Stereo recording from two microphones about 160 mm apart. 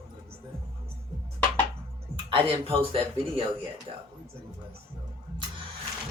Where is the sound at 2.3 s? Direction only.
35° right (ahead or behind).